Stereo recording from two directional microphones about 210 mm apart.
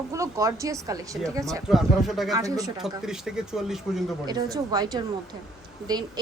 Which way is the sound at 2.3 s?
15° right (ahead or behind).